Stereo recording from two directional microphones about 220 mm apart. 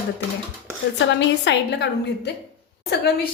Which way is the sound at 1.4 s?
50° left (ahead or behind).